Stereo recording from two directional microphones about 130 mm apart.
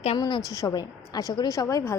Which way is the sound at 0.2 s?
35° left (ahead or behind).